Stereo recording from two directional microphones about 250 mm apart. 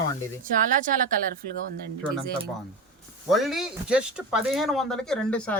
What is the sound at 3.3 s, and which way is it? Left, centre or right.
Speech, centre.